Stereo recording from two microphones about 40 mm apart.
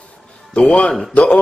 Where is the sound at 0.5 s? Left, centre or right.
Left.